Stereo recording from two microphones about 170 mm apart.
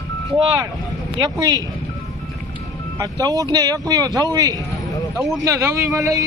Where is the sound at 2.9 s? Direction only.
20° right (ahead or behind).